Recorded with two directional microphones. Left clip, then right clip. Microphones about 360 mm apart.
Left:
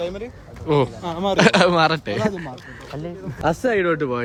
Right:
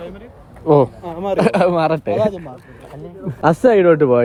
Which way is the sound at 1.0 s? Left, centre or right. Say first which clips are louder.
Even; left.